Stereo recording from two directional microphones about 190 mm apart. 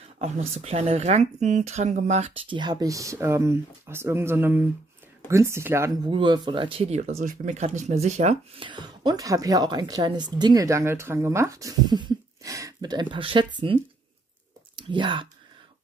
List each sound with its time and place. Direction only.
0.2 s speech: 35° right (ahead or behind); by 5.9 s 15° right (ahead or behind)
6.0 s speech: 25° right (ahead or behind)
14.8 s speech: 25° right (ahead or behind)